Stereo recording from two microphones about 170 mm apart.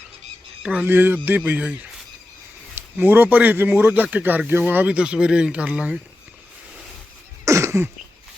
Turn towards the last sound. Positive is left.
turn(degrees=-15)  # may be behind; listen again after turning